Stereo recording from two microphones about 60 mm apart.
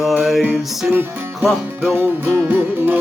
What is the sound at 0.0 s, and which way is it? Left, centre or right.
Music, centre.